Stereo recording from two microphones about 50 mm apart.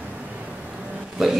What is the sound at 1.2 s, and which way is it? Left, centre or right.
Speech, centre.